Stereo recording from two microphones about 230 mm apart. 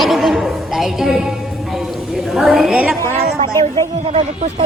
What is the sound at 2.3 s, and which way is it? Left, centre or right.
Speech, centre.